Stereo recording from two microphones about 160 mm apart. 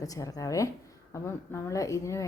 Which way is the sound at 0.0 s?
20° left (ahead or behind).